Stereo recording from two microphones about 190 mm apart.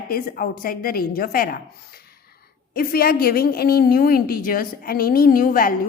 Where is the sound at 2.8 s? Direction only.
50° left (ahead or behind).